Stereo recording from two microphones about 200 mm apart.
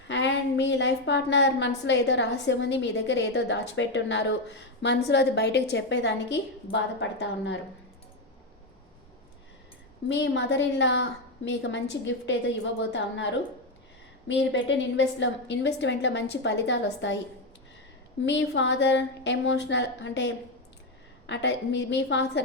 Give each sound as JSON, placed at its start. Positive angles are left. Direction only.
{"t": 0.1, "sound": "a woman's voice", "side_deg": 65}
{"t": 10.1, "sound": "a woman's voice", "side_deg": 65}
{"t": 18.3, "sound": "a woman's voice", "side_deg": 65}